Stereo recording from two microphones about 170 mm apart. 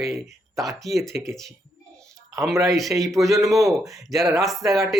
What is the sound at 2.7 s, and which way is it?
Speech, centre (ahead or behind).